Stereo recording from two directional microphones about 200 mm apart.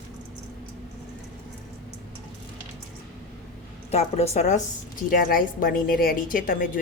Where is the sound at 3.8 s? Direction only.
30° left (ahead or behind).